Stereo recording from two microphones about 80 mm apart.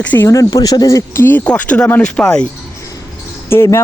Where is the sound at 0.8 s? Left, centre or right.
Left; by 2.5 s centre.